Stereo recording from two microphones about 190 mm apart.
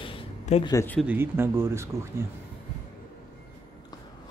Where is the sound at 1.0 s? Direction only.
10° right (ahead or behind).